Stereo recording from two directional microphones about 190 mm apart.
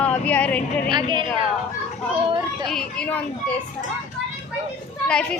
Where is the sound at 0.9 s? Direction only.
25° right (ahead or behind).